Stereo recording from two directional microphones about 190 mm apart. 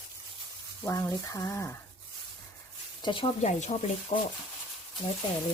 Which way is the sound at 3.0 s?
25° left (ahead or behind).